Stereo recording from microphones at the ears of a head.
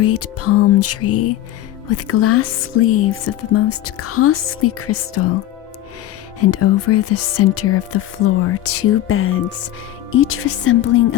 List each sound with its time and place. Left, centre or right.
0.0 s speech: left